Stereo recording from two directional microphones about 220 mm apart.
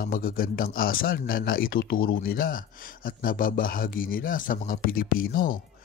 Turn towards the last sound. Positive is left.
turn(degrees=40)  # may be behind; listen again after turning